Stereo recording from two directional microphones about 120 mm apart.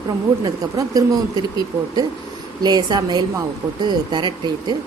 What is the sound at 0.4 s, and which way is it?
A woman's voice, 30° right (ahead or behind).